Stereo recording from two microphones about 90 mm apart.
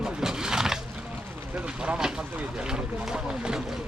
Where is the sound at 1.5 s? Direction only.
10° right (ahead or behind).